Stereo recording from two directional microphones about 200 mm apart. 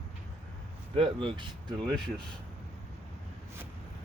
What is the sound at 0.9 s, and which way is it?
Speech, 25° right (ahead or behind).